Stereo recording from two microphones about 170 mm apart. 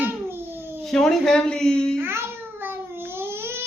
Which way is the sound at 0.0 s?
15° right (ahead or behind).